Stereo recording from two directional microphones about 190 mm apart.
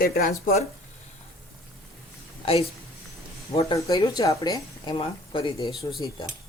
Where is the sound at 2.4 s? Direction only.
30° left (ahead or behind).